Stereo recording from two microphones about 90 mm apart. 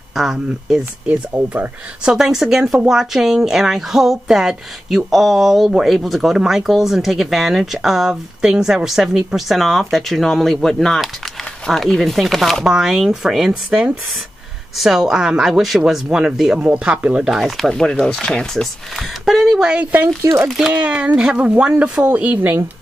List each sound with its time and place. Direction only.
0.1 s speech: centre (ahead or behind)
1.5 s speech: 15° right (ahead or behind)
20.4 s speech: 5° right (ahead or behind)
20.7 s speech: 15° right (ahead or behind)